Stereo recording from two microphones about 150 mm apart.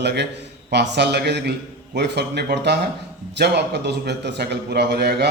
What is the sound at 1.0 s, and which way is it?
A man's voice, 90° right.